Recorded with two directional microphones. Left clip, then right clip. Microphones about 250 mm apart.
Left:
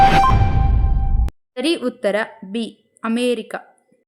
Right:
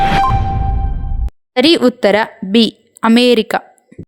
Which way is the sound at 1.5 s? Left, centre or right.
Right.